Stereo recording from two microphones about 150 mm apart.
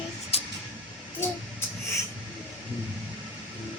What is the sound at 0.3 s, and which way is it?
Vehicle, 40° left (ahead or behind).